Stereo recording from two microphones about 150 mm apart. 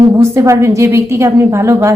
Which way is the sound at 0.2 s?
20° right (ahead or behind).